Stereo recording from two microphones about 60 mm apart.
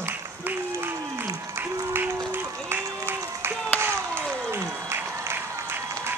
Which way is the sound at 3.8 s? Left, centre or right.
Right.